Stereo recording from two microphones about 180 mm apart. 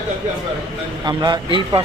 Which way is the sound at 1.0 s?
25° right (ahead or behind).